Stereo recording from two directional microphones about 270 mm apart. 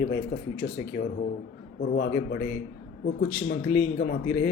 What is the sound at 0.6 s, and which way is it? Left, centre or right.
Speech, left.